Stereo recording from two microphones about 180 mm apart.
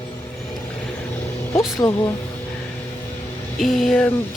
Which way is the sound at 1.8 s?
20° left (ahead or behind).